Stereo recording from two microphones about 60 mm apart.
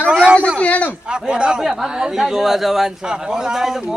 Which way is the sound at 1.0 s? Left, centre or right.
Centre.